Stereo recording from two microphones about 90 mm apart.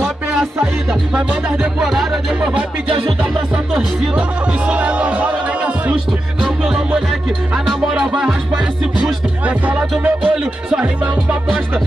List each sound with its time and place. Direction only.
0.0 s music: 5° right (ahead or behind)
4.6 s speech: 15° right (ahead or behind)
6.6 s music: 10° right (ahead or behind)
8.0 s music: 5° right (ahead or behind)
9.5 s music: 15° right (ahead or behind)